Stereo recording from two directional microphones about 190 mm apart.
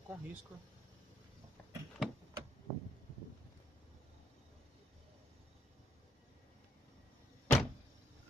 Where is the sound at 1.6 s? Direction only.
5° left (ahead or behind).